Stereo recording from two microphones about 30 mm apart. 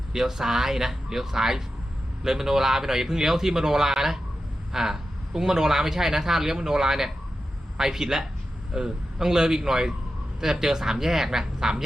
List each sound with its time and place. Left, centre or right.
0.1 s a man's voice: centre